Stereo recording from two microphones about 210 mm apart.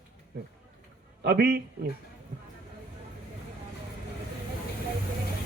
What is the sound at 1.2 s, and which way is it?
Speech, 50° right (ahead or behind).